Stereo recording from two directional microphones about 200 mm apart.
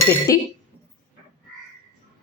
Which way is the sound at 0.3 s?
15° left (ahead or behind).